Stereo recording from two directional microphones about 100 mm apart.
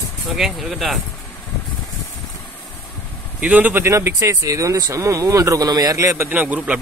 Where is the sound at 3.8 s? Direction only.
30° right (ahead or behind).